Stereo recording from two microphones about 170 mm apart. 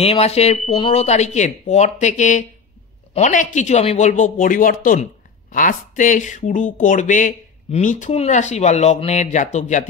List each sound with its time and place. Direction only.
0.0 s speech: 35° left (ahead or behind)